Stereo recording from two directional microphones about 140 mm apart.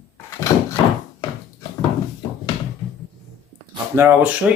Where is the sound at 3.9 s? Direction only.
15° right (ahead or behind).